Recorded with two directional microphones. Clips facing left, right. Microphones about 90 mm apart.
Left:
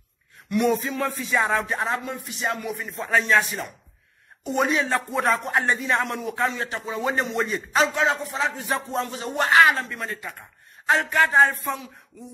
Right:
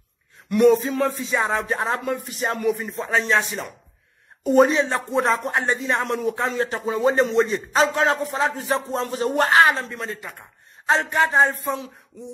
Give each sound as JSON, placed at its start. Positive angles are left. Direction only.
{"t": 0.5, "sound": "a man's voice", "side_deg": -35}
{"t": 1.7, "sound": "speech", "side_deg": -35}
{"t": 2.0, "sound": "speech", "side_deg": -50}
{"t": 4.4, "sound": "speech", "side_deg": -35}
{"t": 4.8, "sound": "a man's voice", "side_deg": -25}
{"t": 7.8, "sound": "a man's voice", "side_deg": -45}
{"t": 8.6, "sound": "a man's voice", "side_deg": -30}